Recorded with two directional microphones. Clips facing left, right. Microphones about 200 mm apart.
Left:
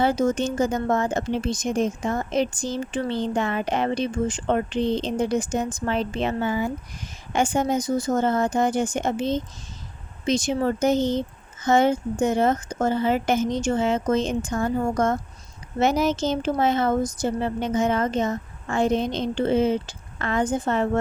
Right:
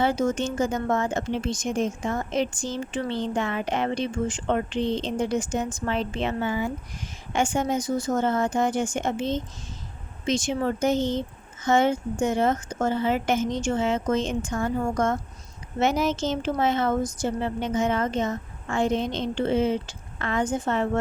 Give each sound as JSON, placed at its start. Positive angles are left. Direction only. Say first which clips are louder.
{"t": 0.0, "sound": "speech", "louder": "left 2 dB", "side_deg": 40}